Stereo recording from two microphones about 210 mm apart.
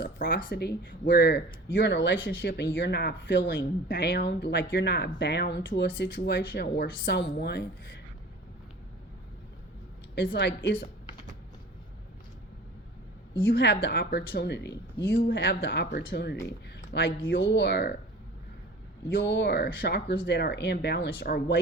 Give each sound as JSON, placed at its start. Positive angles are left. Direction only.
{"t": 0.0, "sound": "speech", "side_deg": 45}
{"t": 10.3, "sound": "speech", "side_deg": 55}
{"t": 13.8, "sound": "speech", "side_deg": 50}
{"t": 16.5, "sound": "a sound", "side_deg": 50}
{"t": 17.2, "sound": "speech", "side_deg": 60}
{"t": 19.2, "sound": "speech", "side_deg": 55}